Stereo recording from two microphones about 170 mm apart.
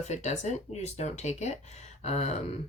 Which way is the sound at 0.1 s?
45° left (ahead or behind).